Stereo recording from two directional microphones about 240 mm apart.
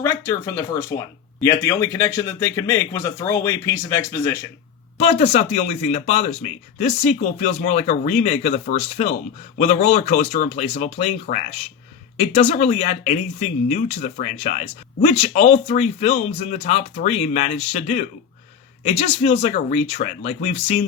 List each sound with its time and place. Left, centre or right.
0.0 s speech: centre
4.9 s speech: left